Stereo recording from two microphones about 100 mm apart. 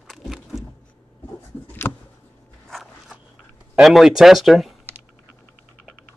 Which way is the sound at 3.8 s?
5° right (ahead or behind).